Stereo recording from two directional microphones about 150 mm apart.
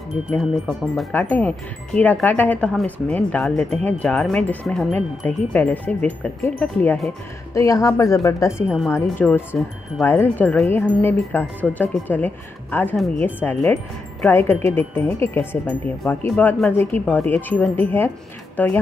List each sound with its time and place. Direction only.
0.3 s speech: centre (ahead or behind)
1.1 s a woman's voice: 10° left (ahead or behind)
8.6 s speech: 5° right (ahead or behind)
8.9 s speech: 15° left (ahead or behind)